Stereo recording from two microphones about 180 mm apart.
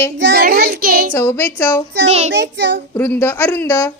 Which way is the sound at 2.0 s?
35° right (ahead or behind).